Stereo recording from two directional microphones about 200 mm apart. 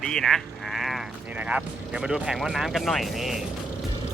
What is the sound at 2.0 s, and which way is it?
Speech, 5° right (ahead or behind).